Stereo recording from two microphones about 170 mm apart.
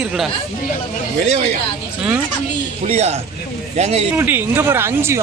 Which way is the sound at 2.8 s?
40° right (ahead or behind).